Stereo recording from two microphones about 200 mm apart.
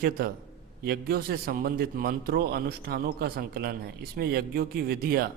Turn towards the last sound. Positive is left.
turn(degrees=-50)  # may be behind; listen again after turning